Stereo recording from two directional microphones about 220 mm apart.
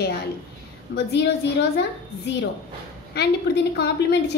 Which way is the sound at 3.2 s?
50° left (ahead or behind).